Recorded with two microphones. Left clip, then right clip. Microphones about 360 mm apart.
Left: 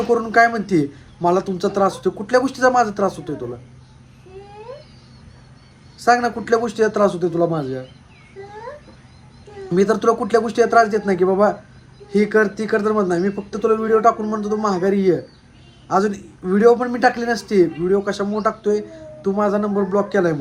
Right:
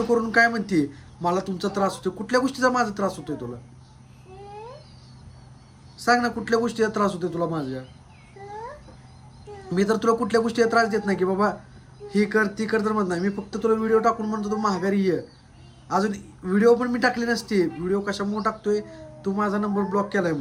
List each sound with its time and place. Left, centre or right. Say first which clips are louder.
0.1 s a man's voice: left 5 dB; centre
6.0 s a man's voice: left 5 dB; centre
9.7 s a man's voice: left 5 dB; centre